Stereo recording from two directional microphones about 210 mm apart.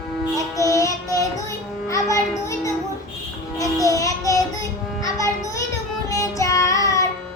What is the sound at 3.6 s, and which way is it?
Child singing, 15° left (ahead or behind).